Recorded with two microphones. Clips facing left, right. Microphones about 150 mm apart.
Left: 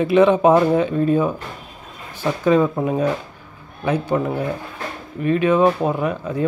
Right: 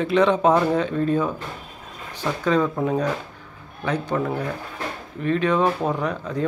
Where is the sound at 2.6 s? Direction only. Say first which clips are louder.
Left 2 dB; 10° left (ahead or behind).